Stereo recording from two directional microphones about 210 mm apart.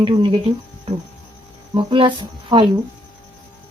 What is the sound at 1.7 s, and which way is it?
Speech, 25° right (ahead or behind).